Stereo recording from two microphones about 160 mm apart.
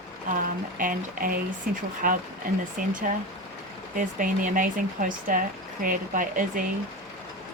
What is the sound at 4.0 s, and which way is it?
Speech, 55° right (ahead or behind).